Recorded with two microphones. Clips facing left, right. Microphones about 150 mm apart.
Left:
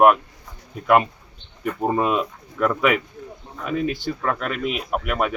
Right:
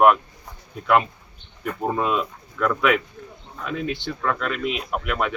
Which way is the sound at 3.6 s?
5° left (ahead or behind).